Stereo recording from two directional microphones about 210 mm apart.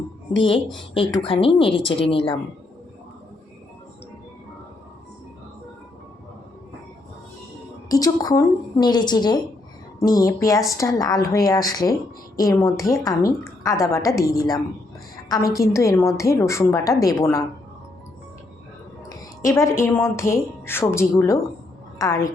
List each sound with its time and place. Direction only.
1.2 s speech: 25° left (ahead or behind)
7.9 s a woman's voice: 15° left (ahead or behind)
19.0 s a woman's voice: 15° left (ahead or behind)